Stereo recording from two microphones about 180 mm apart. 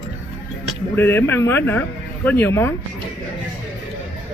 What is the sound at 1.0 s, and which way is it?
A man's voice, 10° left (ahead or behind).